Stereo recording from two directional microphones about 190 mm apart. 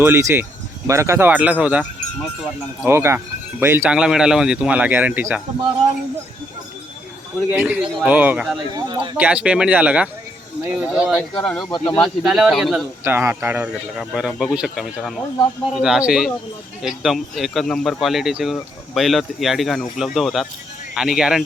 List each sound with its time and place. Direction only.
0.0 s speech: 15° right (ahead or behind)
7.5 s speech: 10° right (ahead or behind)
8.7 s speech: 25° right (ahead or behind)
9.1 s speech: 10° right (ahead or behind)